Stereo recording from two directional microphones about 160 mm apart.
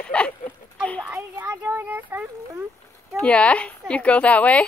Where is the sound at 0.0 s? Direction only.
5° left (ahead or behind).